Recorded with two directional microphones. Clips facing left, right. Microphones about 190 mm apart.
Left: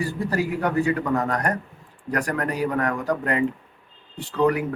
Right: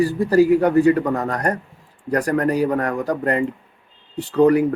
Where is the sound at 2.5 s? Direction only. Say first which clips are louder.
Right 4 dB; 35° right (ahead or behind).